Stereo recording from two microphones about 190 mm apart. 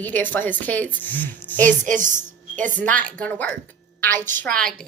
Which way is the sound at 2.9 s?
10° left (ahead or behind).